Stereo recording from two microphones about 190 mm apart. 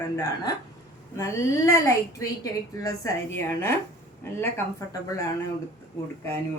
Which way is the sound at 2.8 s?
15° left (ahead or behind).